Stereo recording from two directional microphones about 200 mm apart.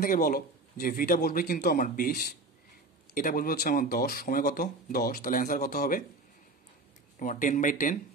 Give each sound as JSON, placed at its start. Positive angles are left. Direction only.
{"t": 0.0, "sound": "speech", "side_deg": 45}
{"t": 7.2, "sound": "speech", "side_deg": 40}